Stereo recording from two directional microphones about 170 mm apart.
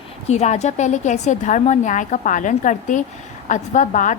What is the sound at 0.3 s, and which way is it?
A woman's voice, 40° left (ahead or behind).